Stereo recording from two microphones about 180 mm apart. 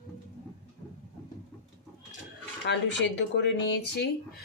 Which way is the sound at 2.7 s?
70° left (ahead or behind).